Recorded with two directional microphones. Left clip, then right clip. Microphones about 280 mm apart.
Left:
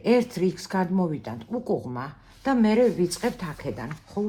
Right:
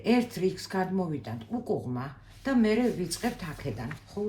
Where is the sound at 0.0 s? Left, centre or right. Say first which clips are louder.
Left 5 dB; left.